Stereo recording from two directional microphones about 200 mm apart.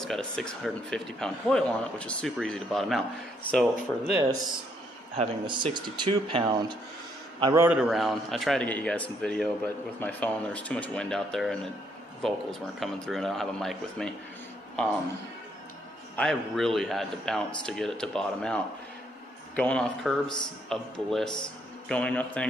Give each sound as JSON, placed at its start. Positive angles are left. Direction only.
{"t": 0.0, "sound": "speech", "side_deg": 0}
{"t": 4.1, "sound": "speech", "side_deg": -15}
{"t": 5.1, "sound": "speech", "side_deg": -30}
{"t": 7.5, "sound": "speech", "side_deg": -10}
{"t": 16.2, "sound": "speech", "side_deg": 5}